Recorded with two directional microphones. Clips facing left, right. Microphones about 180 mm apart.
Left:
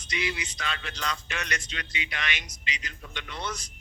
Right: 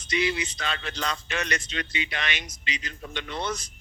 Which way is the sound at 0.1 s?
30° right (ahead or behind).